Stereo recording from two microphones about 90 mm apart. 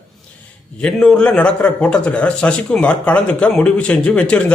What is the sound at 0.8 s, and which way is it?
Speech, 10° left (ahead or behind).